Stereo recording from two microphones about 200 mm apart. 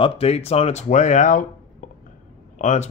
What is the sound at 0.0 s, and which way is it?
Speech, 30° left (ahead or behind).